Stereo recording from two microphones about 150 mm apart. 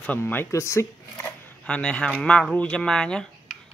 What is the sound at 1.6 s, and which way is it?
Speech, 5° left (ahead or behind).